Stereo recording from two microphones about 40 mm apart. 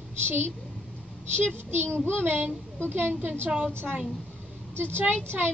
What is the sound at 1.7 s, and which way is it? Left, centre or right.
Speech, right.